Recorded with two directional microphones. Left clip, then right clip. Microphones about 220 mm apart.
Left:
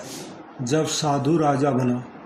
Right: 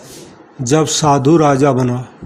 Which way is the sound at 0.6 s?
35° right (ahead or behind).